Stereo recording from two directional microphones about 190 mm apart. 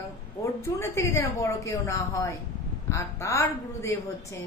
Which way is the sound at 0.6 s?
15° left (ahead or behind).